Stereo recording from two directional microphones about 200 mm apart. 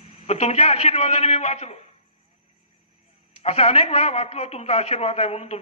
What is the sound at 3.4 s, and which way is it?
A man's voice, 30° left (ahead or behind).